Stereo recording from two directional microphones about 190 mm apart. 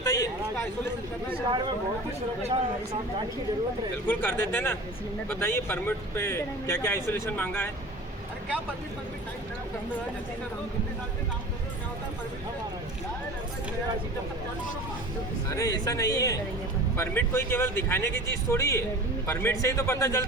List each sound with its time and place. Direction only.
0.0 s a sound: 15° left (ahead or behind)
2.4 s speech: 35° right (ahead or behind)
4.1 s speech: 10° left (ahead or behind)
15.5 s speech: 20° left (ahead or behind)